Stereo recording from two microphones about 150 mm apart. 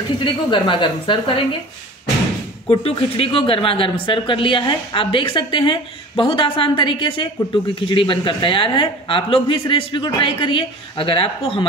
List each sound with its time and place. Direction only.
0.2 s speech: 35° left (ahead or behind)
2.7 s speech: 40° left (ahead or behind)